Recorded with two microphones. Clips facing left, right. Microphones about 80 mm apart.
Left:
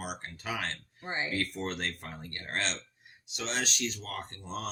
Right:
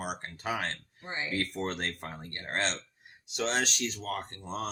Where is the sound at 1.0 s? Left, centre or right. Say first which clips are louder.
Left 3 dB; left.